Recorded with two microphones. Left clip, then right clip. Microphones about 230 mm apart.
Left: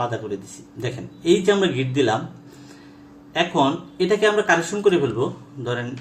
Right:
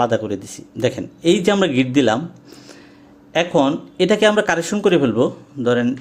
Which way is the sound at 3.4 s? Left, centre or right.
Right.